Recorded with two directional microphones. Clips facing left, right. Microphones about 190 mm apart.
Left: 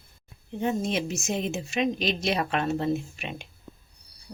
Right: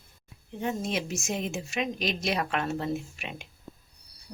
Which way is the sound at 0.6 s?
20° left (ahead or behind).